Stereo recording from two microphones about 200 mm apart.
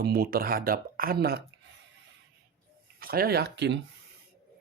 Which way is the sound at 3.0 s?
50° right (ahead or behind).